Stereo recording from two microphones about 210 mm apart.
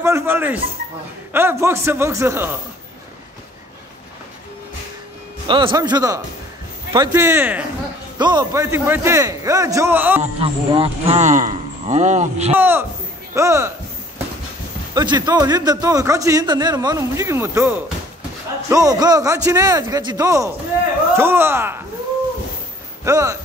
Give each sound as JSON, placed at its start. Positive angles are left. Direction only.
{"t": 0.0, "sound": "a man's voice", "side_deg": -10}
{"t": 5.5, "sound": "a man's voice", "side_deg": -20}
{"t": 10.2, "sound": "speech", "side_deg": -25}
{"t": 12.5, "sound": "a man's voice", "side_deg": -10}
{"t": 15.0, "sound": "a man's voice", "side_deg": -20}
{"t": 23.0, "sound": "a man's voice", "side_deg": -15}